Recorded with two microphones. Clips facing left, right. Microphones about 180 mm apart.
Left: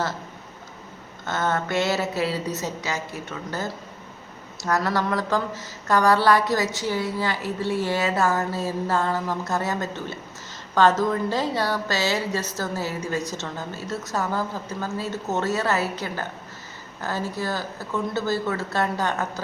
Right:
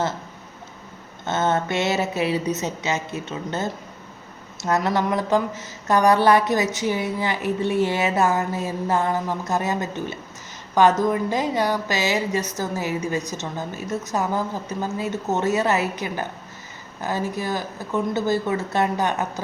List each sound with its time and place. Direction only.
1.2 s a woman's voice: 20° right (ahead or behind)